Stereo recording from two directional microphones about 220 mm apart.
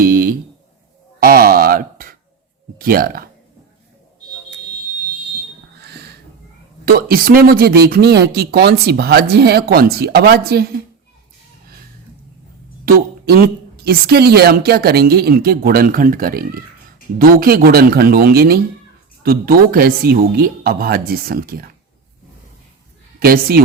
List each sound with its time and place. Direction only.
0.0 s a sound: 40° right (ahead or behind)
2.7 s speech: 40° right (ahead or behind)
5.8 s a sound: 50° right (ahead or behind)
6.8 s speech: 40° right (ahead or behind)
12.8 s speech: 45° right (ahead or behind)
23.2 s speech: 45° right (ahead or behind)